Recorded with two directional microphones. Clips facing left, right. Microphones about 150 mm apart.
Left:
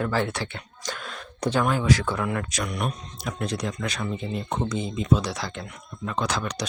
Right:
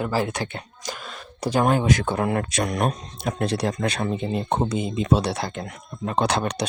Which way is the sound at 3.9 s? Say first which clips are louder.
Right 5 dB; 45° right (ahead or behind).